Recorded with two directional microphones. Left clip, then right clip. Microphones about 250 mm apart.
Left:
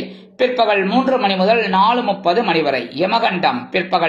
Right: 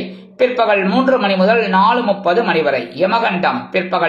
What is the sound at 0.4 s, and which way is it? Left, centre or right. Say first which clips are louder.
A man's voice: right 2 dB; left.